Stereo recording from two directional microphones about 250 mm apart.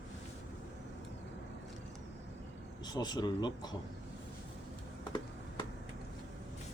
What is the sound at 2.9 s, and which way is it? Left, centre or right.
Speech, centre.